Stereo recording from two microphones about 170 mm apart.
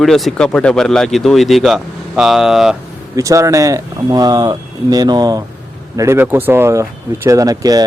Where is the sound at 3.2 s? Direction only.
20° right (ahead or behind).